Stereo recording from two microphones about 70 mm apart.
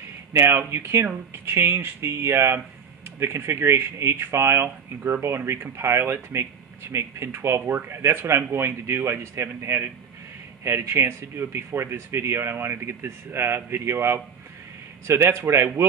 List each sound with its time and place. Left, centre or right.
0.3 s speech: right